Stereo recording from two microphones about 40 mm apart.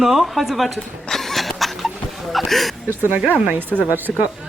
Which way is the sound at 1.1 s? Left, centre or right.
Centre.